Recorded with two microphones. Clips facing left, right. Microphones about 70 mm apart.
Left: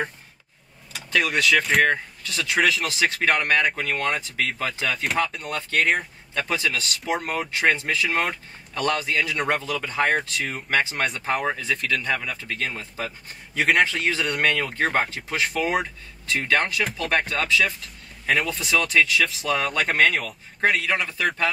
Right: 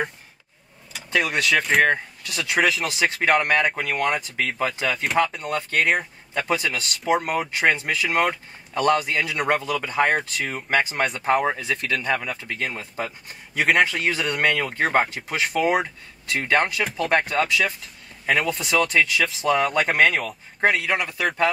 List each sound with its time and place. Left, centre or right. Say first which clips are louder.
0.9 s speech: even; centre
1.9 s speech: right 1 dB; centre
4.8 s speech: right 2 dB; centre
7.2 s speech: right 1 dB; centre
13.6 s speech: right 1 dB; centre
13.8 s speech: right 1 dB; centre
14.2 s speech: right 1 dB; centre
14.5 s speech: right 2 dB; centre
19.7 s speech: right 2 dB; centre